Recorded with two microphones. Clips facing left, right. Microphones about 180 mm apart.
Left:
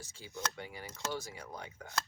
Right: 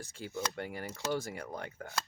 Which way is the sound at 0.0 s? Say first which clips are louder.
Right 4 dB; 60° right (ahead or behind).